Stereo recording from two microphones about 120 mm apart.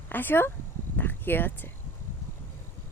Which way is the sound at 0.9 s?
15° left (ahead or behind).